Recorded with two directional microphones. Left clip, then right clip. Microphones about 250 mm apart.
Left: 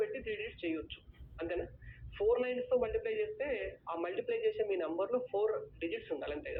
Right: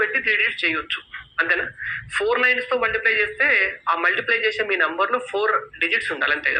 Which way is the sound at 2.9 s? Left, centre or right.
Centre.